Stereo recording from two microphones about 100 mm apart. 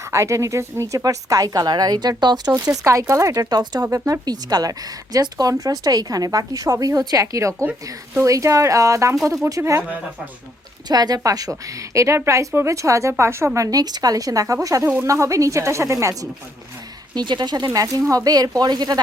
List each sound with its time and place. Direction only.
0.1 s a woman's voice: 30° right (ahead or behind)
3.8 s a woman's voice: 35° right (ahead or behind)
10.8 s a woman's voice: 45° right (ahead or behind)
17.2 s a woman's voice: 45° right (ahead or behind)
17.7 s a woman's voice: 35° right (ahead or behind)